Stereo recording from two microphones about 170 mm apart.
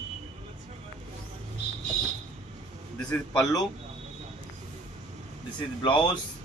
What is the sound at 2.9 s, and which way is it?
Speech, 5° left (ahead or behind).